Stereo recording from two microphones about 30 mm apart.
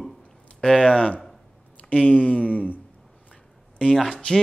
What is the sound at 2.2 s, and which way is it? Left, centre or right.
Speech, left.